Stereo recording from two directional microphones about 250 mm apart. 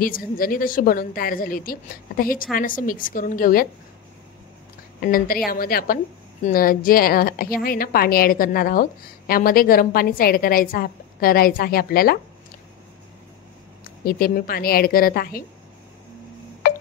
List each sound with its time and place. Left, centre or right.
0.0 s a woman's voice: left
5.0 s a woman's voice: left
13.8 s a woman's voice: left